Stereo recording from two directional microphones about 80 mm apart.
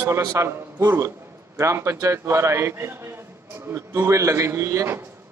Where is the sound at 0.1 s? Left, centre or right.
Right.